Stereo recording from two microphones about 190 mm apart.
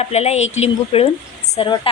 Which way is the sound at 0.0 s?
35° left (ahead or behind).